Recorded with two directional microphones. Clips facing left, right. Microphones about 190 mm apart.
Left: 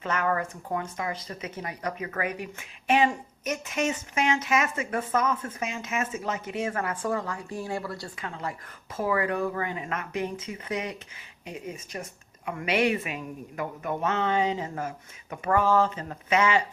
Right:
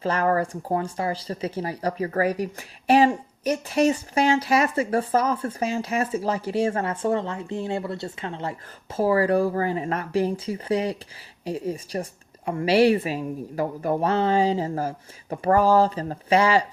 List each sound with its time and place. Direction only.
0.0 s speech: 35° right (ahead or behind)